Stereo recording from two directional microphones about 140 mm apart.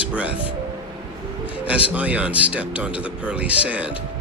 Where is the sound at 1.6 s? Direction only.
10° right (ahead or behind).